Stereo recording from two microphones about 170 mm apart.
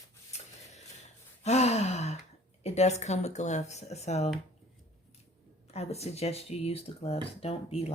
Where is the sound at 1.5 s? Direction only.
40° left (ahead or behind).